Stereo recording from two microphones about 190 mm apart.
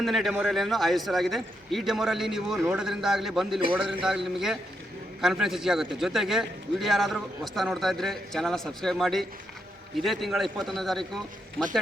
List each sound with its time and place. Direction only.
0.0 s a man's voice: centre (ahead or behind)